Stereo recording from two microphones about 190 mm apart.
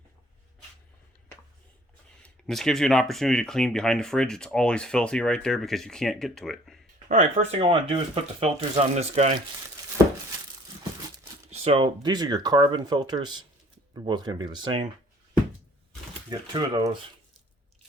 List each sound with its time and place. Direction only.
2.2 s speech: centre (ahead or behind)
7.1 s speech: 40° right (ahead or behind)
11.6 s speech: 30° right (ahead or behind)
16.3 s speech: 20° right (ahead or behind)